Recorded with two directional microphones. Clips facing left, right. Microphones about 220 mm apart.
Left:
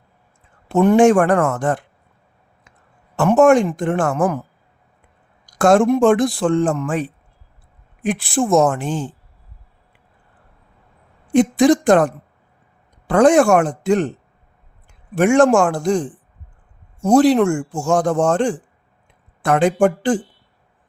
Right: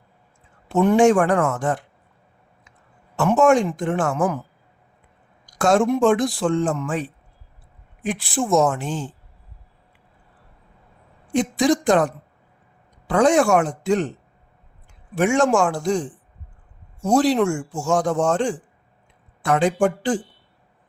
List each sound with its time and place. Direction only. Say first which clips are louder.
0.7 s a man's voice: left 3 dB; 55° left (ahead or behind)
3.2 s speech: left 4 dB; 55° left (ahead or behind)
5.5 s speech: left 4 dB; 55° left (ahead or behind)
8.0 s a man's voice: left 5 dB; 50° left (ahead or behind)
11.3 s a man's voice: left 6 dB; 50° left (ahead or behind)
15.1 s a man's voice: left 5 dB; 55° left (ahead or behind)